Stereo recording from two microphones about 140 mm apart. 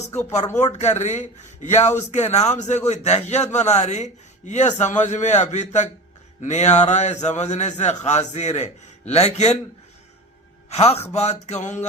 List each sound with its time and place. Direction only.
0.3 s a man's voice: 55° left (ahead or behind)
10.7 s a man's voice: 50° left (ahead or behind)